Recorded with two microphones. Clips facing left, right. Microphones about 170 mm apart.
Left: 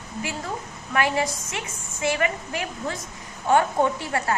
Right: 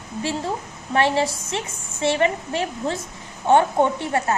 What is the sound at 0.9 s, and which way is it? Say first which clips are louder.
A woman's voice: right 4 dB; 30° right (ahead or behind).